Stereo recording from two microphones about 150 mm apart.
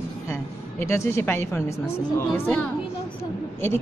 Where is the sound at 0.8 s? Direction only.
20° left (ahead or behind).